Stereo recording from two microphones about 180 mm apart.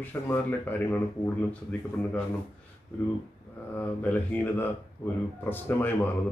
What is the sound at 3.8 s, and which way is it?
Speech, 10° left (ahead or behind).